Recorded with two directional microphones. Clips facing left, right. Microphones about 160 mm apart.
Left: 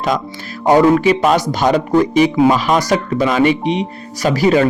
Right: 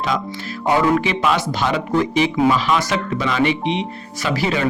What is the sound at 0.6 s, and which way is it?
Speech, 40° left (ahead or behind).